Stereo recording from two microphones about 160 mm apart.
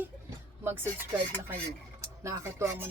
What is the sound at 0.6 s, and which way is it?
Music, 15° right (ahead or behind).